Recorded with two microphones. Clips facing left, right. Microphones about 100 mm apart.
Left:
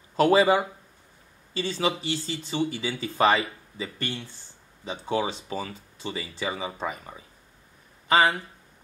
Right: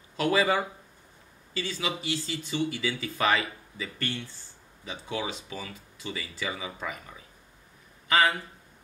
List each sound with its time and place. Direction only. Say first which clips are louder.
0.2 s speech: left 6 dB; 30° left (ahead or behind)
1.5 s speech: left 5 dB; 30° left (ahead or behind)